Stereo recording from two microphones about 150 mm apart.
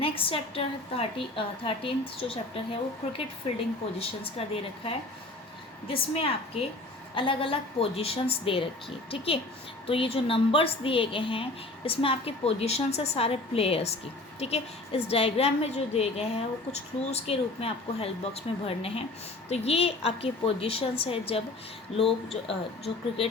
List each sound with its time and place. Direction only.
0.0 s a woman's voice: 40° left (ahead or behind)